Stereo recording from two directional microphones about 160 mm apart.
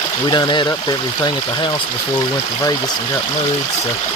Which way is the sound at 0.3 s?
30° left (ahead or behind).